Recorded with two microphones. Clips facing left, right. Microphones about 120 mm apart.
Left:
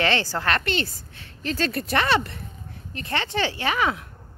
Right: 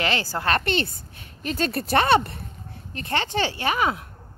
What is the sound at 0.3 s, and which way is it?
Speech, 25° right (ahead or behind).